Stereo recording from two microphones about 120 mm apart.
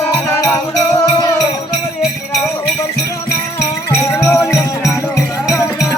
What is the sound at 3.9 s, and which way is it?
Music, 20° left (ahead or behind).